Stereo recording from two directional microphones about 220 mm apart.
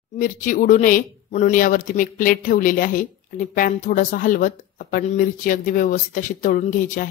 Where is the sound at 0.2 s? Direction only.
35° left (ahead or behind).